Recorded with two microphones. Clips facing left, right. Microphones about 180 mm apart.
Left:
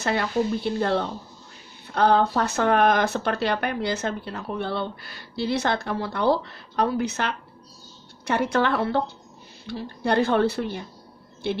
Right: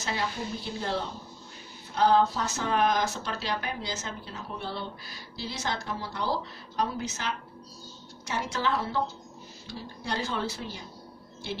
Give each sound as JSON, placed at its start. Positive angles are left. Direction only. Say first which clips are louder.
{"t": 0.0, "sound": "speech", "louder": "left 9 dB", "side_deg": 60}